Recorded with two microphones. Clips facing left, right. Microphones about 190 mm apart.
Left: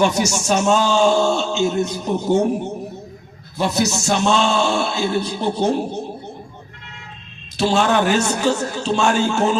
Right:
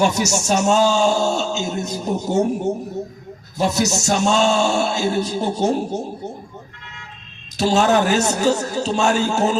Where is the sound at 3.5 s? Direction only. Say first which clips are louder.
Even; 40° right (ahead or behind).